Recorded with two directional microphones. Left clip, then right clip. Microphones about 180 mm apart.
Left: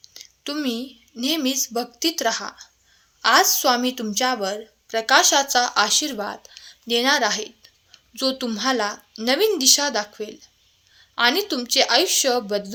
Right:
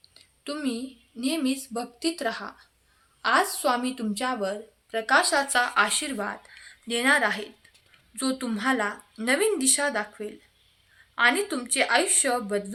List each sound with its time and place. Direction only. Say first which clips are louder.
0.0 s a woman's voice: left 7 dB; 40° left (ahead or behind)
3.2 s a sound: left 6 dB; 40° left (ahead or behind)
3.5 s speech: left 6 dB; 40° left (ahead or behind)